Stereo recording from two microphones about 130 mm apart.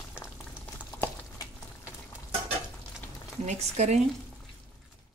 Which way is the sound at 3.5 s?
60° right (ahead or behind).